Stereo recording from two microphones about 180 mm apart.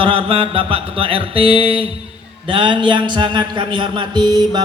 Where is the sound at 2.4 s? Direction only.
25° right (ahead or behind).